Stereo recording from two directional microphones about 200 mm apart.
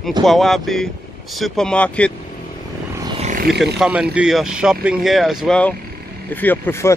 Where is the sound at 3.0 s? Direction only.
30° right (ahead or behind).